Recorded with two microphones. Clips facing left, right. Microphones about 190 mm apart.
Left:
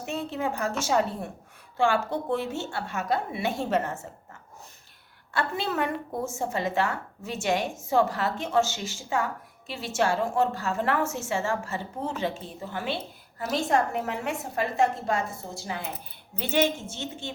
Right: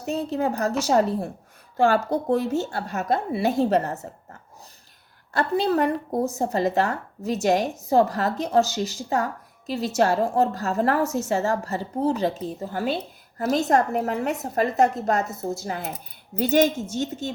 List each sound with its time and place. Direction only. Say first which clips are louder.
0.0 s a woman's voice: right 5 dB; 40° right (ahead or behind)
5.3 s a woman's voice: right 7 dB; 40° right (ahead or behind)